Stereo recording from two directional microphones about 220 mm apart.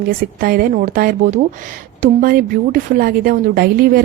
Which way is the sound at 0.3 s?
40° right (ahead or behind).